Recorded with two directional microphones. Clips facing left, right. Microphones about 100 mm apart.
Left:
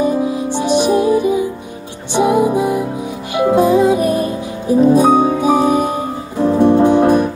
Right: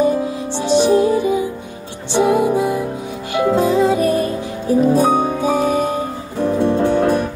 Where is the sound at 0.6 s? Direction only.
15° left (ahead or behind).